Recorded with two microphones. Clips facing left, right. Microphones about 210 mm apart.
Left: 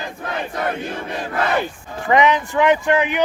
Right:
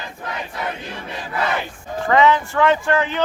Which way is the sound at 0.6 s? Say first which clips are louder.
Left 5 dB; 50° left (ahead or behind).